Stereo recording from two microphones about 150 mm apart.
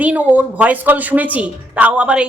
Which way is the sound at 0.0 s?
10° right (ahead or behind).